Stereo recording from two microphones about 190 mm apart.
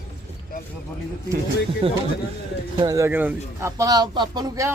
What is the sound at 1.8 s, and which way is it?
Speech, 30° right (ahead or behind).